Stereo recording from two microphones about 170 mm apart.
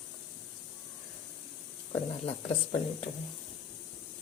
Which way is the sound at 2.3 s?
40° left (ahead or behind).